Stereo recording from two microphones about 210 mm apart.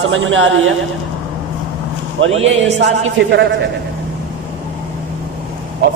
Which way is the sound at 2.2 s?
65° right (ahead or behind).